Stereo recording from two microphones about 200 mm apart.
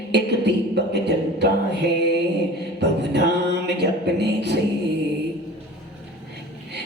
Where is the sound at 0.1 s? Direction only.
55° right (ahead or behind).